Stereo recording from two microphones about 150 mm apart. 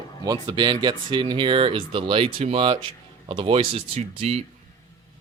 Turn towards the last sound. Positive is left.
turn(degrees=-45)  # may be behind; listen again after turning